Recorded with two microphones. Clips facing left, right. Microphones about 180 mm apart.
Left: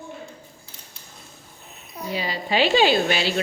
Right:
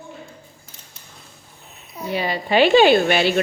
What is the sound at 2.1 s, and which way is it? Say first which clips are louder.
A woman's voice: right 5 dB; 60° right (ahead or behind).